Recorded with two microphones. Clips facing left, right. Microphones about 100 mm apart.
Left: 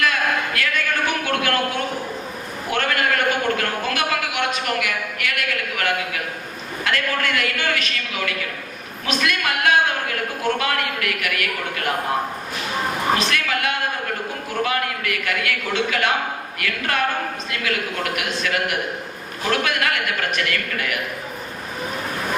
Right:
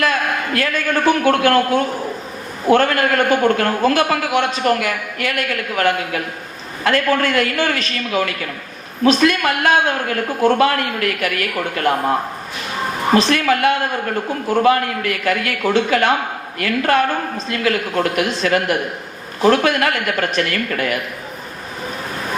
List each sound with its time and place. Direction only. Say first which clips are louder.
0.5 s a man's voice: right 5 dB; 35° right (ahead or behind)
13.1 s a man's voice: right 8 dB; 30° right (ahead or behind)